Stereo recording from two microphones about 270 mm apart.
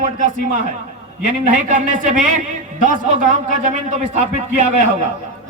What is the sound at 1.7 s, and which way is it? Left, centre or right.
Speech, right.